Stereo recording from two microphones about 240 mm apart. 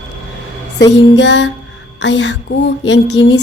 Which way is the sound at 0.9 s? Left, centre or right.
Left.